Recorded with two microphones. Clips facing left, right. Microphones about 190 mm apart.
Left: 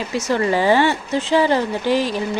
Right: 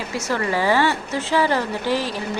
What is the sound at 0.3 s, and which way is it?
Speech, 20° left (ahead or behind).